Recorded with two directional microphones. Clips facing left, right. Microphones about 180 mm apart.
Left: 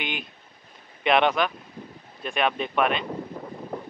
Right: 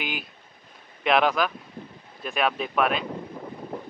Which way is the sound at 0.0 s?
5° right (ahead or behind).